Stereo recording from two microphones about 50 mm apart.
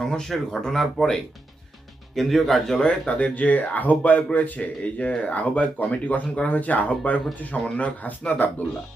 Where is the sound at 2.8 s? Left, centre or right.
Left.